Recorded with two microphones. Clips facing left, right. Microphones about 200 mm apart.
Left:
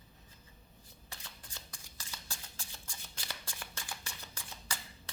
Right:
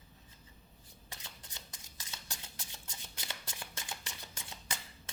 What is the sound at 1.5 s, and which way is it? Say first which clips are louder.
Shuffling cards: left 1 dB; 20° right (ahead or behind).